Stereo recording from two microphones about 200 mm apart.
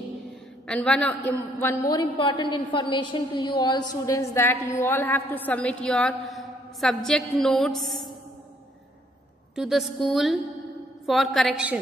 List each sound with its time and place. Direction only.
0.7 s a man's voice: 5° left (ahead or behind)
9.6 s a woman's voice: centre (ahead or behind)